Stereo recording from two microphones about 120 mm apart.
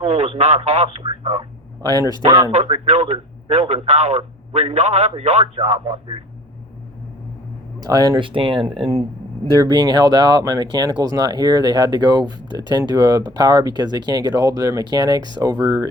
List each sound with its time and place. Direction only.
0.0 s radio: 55° right (ahead or behind)
1.8 s speech: 30° right (ahead or behind)
2.2 s speech: 45° right (ahead or behind)
2.5 s speech: 60° right (ahead or behind)
7.8 s speech: 30° right (ahead or behind)